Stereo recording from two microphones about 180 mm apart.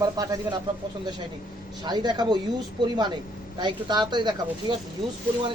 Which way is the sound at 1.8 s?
25° right (ahead or behind).